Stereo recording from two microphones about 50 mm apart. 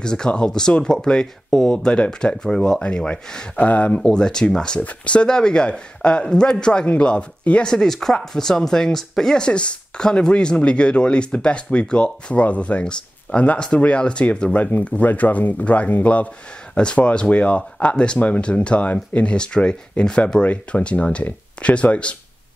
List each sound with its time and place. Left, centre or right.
0.0 s speech: centre
3.5 s speech: left
7.6 s speech: centre; by 22.1 s left